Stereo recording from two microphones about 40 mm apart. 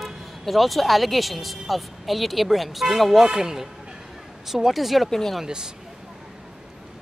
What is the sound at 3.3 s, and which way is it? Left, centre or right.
Speech, centre.